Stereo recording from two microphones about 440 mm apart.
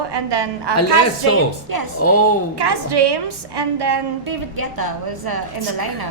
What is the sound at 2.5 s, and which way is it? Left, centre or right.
A woman's voice, right.